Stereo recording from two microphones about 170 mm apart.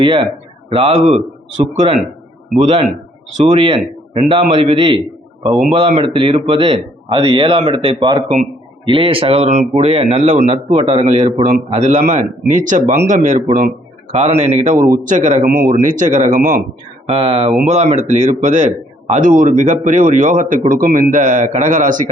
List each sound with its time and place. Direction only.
0.0 s a man's voice: 30° right (ahead or behind); by 13.7 s 50° right (ahead or behind)
14.1 s a man's voice: 40° right (ahead or behind); by 16.6 s 55° right (ahead or behind)
17.1 s a man's voice: 35° right (ahead or behind); by 22.1 s 50° right (ahead or behind)